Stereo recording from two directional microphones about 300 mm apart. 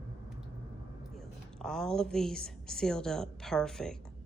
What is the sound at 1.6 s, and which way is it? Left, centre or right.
A woman's voice, centre.